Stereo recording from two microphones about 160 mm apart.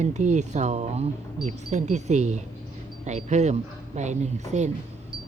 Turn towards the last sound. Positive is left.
turn(degrees=-45)  # may be behind; listen again after turning